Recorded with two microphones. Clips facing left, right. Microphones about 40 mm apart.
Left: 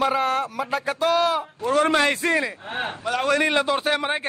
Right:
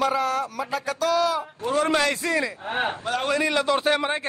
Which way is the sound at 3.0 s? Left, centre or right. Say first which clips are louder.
Left 6 dB; left.